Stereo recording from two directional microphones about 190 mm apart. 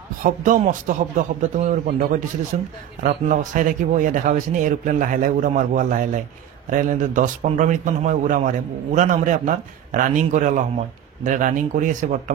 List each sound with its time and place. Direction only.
0.2 s a man's voice: 45° right (ahead or behind)